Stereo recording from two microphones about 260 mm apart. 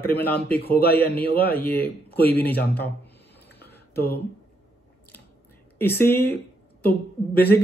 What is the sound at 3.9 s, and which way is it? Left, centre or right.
Speech, left.